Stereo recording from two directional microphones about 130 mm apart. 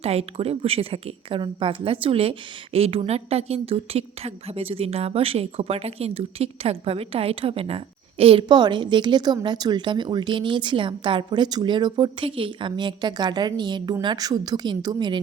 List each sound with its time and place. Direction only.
0.0 s a woman's voice: 50° right (ahead or behind); by 15.2 s 35° right (ahead or behind)